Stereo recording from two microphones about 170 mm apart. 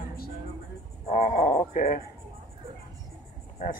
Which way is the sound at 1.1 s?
45° left (ahead or behind).